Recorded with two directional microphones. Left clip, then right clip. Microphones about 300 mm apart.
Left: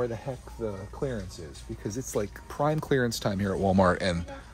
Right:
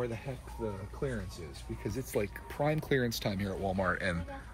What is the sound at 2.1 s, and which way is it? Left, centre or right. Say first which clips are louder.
Speech: left 4 dB; centre.